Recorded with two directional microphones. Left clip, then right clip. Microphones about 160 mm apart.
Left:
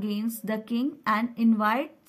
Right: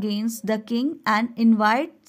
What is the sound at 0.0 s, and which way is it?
Speech, 40° right (ahead or behind).